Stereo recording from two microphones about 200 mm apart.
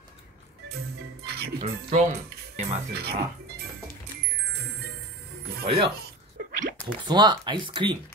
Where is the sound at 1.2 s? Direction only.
55° right (ahead or behind).